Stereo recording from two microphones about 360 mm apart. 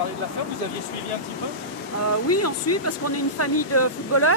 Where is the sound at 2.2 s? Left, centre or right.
Left.